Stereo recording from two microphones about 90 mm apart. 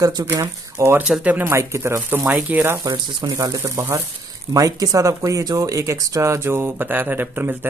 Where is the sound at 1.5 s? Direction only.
30° right (ahead or behind).